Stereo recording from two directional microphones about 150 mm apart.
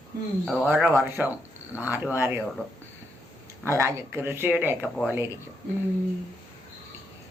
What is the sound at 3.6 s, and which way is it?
Speech, 20° right (ahead or behind).